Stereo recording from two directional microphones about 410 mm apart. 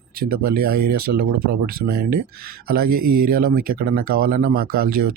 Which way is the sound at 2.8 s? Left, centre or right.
Right.